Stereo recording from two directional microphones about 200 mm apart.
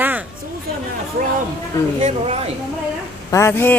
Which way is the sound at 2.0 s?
30° right (ahead or behind).